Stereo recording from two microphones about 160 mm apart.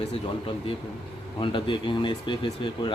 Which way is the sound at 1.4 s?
30° left (ahead or behind).